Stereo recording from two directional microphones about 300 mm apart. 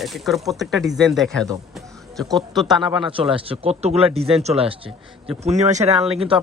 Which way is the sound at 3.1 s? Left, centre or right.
Centre.